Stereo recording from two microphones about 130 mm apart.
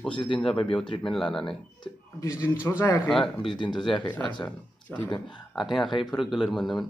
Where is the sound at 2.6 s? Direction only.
25° left (ahead or behind).